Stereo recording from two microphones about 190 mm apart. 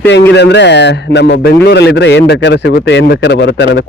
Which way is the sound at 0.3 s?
60° left (ahead or behind).